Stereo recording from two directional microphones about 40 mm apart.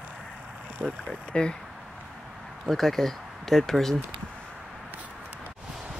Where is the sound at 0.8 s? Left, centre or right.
Right.